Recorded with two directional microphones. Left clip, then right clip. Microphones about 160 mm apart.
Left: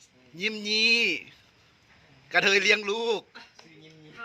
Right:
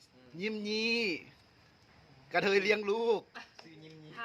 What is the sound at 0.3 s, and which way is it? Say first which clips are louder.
Speech: left 9 dB; 10° right (ahead or behind).